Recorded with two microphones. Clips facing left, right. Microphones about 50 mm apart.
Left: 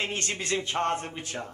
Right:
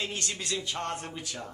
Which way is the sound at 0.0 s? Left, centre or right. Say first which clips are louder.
Left 3 dB; left.